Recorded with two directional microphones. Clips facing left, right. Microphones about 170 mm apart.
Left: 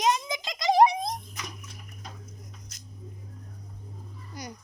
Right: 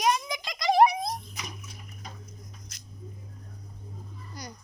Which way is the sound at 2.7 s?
70° right (ahead or behind).